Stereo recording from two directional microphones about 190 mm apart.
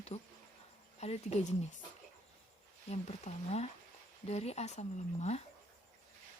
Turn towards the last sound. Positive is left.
turn(degrees=35)  # may be behind; listen again after turning